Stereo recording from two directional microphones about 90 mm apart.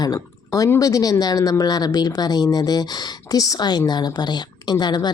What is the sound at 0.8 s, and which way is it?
Speech, 40° left (ahead or behind).